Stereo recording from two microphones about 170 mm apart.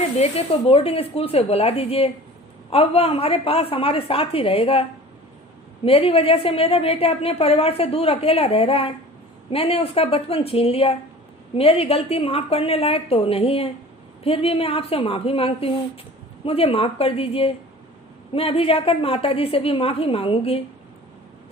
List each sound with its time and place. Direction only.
0.2 s a woman's voice: 35° left (ahead or behind)